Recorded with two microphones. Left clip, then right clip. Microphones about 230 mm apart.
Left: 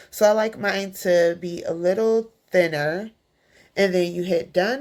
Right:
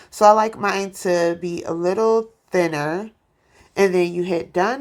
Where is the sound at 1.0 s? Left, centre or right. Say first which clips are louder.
Left 2 dB; centre.